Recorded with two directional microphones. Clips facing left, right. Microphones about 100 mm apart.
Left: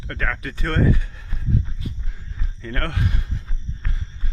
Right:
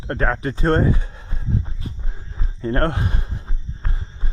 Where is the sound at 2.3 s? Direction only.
30° right (ahead or behind).